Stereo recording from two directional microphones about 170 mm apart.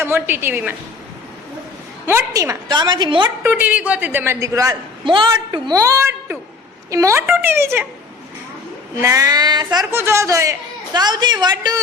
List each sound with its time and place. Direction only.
0.0 s a woman's voice: 15° right (ahead or behind)
2.0 s a woman's voice: 15° right (ahead or behind)
3.4 s a woman's voice: 10° right (ahead or behind)
9.0 s a woman's voice: 20° right (ahead or behind)